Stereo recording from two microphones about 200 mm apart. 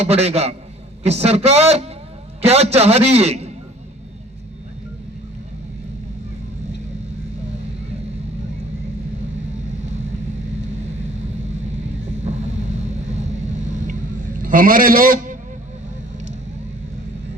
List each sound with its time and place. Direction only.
0.0 s a man's voice: 30° right (ahead or behind)
14.3 s a man's voice: 45° right (ahead or behind)